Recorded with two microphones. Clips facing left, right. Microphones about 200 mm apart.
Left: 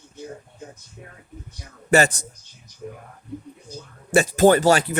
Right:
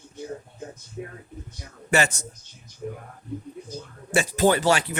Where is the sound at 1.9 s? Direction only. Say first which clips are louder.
Left 5 dB; 35° left (ahead or behind).